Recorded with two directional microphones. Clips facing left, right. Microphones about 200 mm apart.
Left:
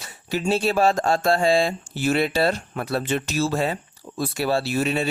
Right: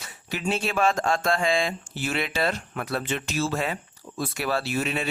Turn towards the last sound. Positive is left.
turn(degrees=35)  # may be behind; listen again after turning